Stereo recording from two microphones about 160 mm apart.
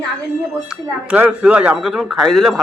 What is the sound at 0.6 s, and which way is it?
Speech, 10° right (ahead or behind).